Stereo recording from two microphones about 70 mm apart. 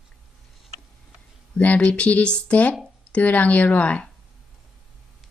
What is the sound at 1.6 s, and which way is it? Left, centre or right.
Speech, left.